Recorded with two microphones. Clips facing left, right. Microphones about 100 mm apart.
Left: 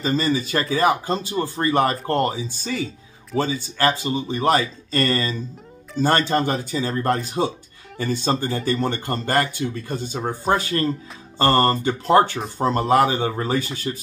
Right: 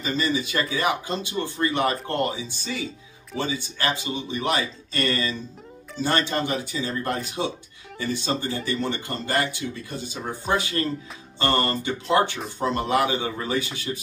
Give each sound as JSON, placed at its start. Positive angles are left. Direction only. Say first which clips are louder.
{"t": 0.0, "sound": "speech", "louder": "left 4 dB", "side_deg": 40}